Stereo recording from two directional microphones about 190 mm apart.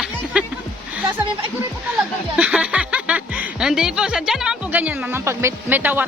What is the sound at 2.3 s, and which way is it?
Speech, 5° right (ahead or behind).